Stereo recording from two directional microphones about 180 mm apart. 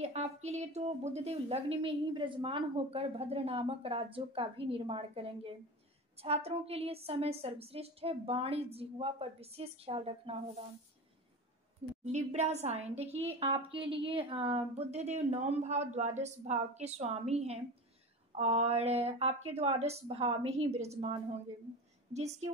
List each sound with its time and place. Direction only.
0.0 s a woman's voice: 40° right (ahead or behind)
12.0 s a woman's voice: 40° right (ahead or behind)